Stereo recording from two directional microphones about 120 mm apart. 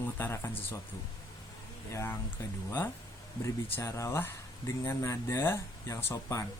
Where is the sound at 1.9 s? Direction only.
20° left (ahead or behind).